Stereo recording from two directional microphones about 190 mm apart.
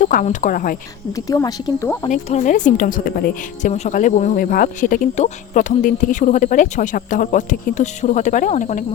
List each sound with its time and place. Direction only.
0.0 s speech: 40° left (ahead or behind)
1.1 s speech: 20° left (ahead or behind)
2.0 s speech: 40° left (ahead or behind)
3.7 s speech: 40° left (ahead or behind)